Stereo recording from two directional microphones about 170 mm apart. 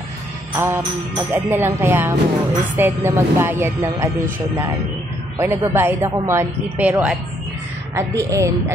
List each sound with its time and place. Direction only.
0.6 s speech: 10° right (ahead or behind)